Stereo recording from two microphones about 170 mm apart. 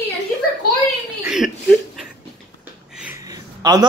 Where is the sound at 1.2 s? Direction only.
5° right (ahead or behind).